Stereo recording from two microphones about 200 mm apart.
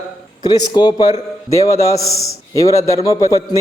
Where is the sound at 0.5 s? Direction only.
20° left (ahead or behind).